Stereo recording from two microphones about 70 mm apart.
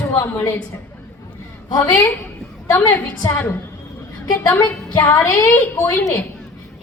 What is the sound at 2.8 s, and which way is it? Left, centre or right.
Speech, left.